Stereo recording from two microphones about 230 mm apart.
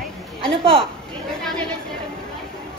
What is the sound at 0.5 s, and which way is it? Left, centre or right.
Speech, right.